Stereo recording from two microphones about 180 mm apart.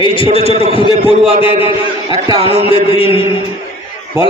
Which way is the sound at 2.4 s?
30° left (ahead or behind).